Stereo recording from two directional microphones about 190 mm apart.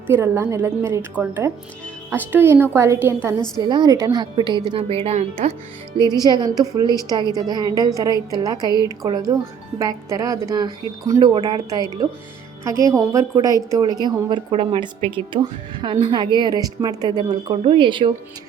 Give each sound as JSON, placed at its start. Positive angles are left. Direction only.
{"t": 0.1, "sound": "a woman's voice", "side_deg": -15}
{"t": 3.6, "sound": "speech", "side_deg": -25}
{"t": 6.0, "sound": "speech", "side_deg": -20}